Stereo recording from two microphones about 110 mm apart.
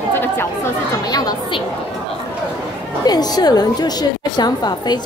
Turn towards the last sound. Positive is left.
turn(degrees=40)  # may be behind; listen again after turning